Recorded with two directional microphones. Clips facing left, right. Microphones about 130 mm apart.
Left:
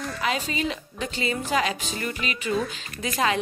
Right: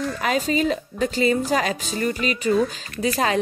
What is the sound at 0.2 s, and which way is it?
A woman's voice, 45° right (ahead or behind).